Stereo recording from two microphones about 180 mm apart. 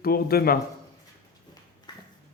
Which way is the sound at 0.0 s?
55° left (ahead or behind).